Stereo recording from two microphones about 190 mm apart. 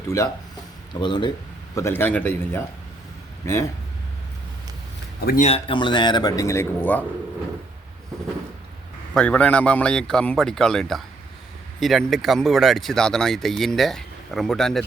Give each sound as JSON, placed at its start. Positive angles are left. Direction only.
{"t": 1.0, "sound": "speech", "side_deg": 25}
{"t": 1.7, "sound": "a man's voice", "side_deg": 15}
{"t": 5.4, "sound": "speech", "side_deg": 30}
{"t": 9.1, "sound": "speech", "side_deg": 5}